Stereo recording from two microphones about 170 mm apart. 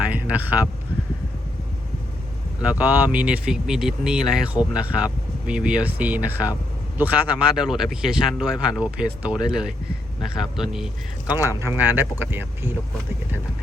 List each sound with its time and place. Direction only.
0.1 s speech: 10° right (ahead or behind)
2.6 s speech: 10° right (ahead or behind)
11.4 s speech: 15° right (ahead or behind)